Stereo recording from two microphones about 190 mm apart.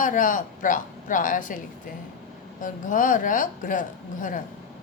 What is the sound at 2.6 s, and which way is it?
Speech, 45° left (ahead or behind).